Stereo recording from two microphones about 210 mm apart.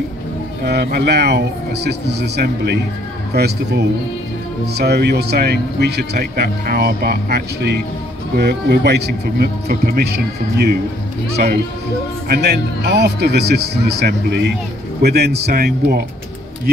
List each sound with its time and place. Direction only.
0.7 s speech: 50° right (ahead or behind)
12.3 s speech: 50° right (ahead or behind)